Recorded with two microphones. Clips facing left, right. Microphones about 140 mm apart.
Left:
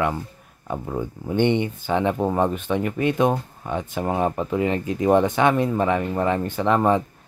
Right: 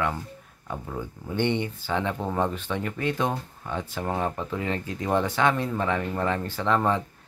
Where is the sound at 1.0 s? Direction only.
20° left (ahead or behind).